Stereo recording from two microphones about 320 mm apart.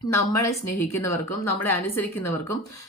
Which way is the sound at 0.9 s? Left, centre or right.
Left.